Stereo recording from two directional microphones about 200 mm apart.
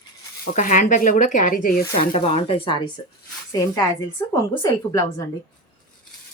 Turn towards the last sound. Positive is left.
turn(degrees=15)  # may be behind; listen again after turning